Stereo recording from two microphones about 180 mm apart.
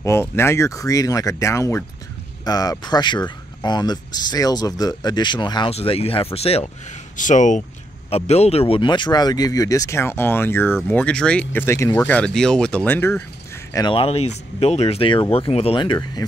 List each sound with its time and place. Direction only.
0.0 s speech: 15° left (ahead or behind); by 6.7 s 35° left (ahead or behind)
7.2 s speech: 45° left (ahead or behind); by 12.2 s 15° left (ahead or behind)
12.2 s speech: 5° left (ahead or behind)
13.7 s speech: 30° left (ahead or behind)